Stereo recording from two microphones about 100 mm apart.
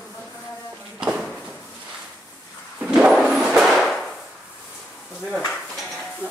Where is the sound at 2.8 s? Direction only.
10° right (ahead or behind).